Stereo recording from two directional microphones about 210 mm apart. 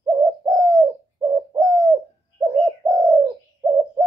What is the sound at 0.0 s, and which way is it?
Bird, 5° right (ahead or behind).